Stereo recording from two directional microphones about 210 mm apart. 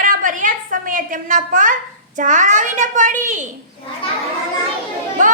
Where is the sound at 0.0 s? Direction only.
40° right (ahead or behind).